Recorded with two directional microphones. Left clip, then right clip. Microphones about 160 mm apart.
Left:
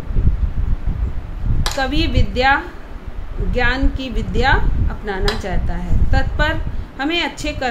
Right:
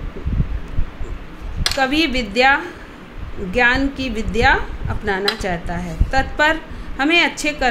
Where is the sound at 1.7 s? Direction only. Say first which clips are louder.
Right 3 dB; 15° right (ahead or behind).